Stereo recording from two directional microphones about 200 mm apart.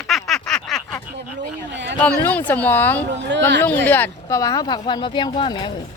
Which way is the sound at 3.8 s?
10° left (ahead or behind).